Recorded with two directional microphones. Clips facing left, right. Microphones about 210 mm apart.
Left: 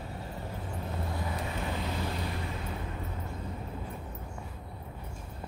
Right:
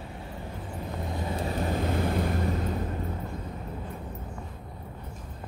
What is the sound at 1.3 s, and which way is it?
Vehicle, 30° right (ahead or behind).